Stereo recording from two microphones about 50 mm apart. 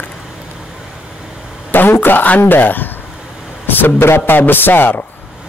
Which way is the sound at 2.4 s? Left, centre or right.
Left.